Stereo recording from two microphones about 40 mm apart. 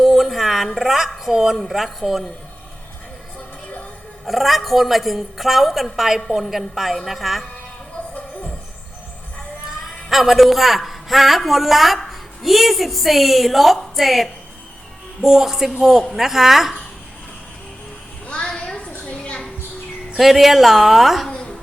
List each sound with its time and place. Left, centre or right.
0.0 s a sound: centre
1.5 s a woman's voice: centre
4.3 s a woman's voice: centre
9.8 s a man's voice: centre
18.8 s a sound: left
20.1 s a woman's voice: centre